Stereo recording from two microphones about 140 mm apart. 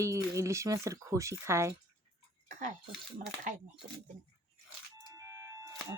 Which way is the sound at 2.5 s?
65° right (ahead or behind).